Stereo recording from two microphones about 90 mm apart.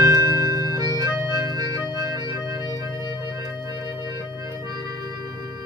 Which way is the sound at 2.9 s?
55° left (ahead or behind).